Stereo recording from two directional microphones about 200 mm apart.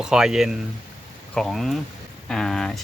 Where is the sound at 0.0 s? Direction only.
5° right (ahead or behind).